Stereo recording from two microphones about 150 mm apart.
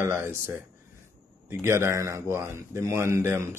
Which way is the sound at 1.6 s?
15° right (ahead or behind).